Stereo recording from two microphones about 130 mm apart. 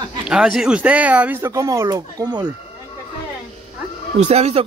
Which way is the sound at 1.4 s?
25° right (ahead or behind).